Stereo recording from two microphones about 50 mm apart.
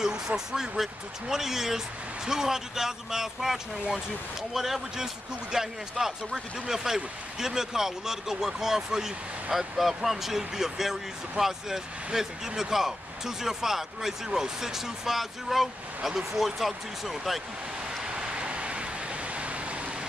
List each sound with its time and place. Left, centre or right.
0.5 s speech: centre
18.0 s vehicle: centre